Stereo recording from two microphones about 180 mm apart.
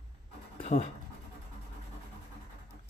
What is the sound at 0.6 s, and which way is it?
Dog, 35° left (ahead or behind).